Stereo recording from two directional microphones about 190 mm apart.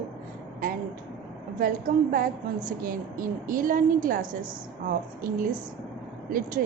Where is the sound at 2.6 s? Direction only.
45° right (ahead or behind).